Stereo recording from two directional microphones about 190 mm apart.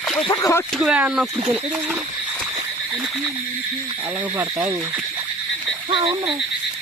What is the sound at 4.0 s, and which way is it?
Speech, 10° right (ahead or behind).